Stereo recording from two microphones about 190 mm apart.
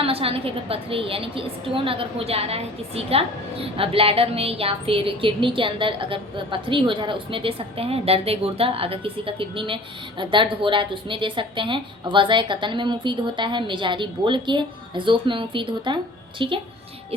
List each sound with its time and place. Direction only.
0.0 s a woman's voice: 30° right (ahead or behind)